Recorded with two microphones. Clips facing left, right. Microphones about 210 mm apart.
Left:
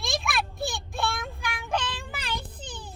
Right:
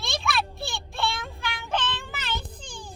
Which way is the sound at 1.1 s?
Centre (ahead or behind).